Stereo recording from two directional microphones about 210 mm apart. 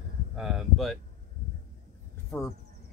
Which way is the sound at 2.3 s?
15° left (ahead or behind).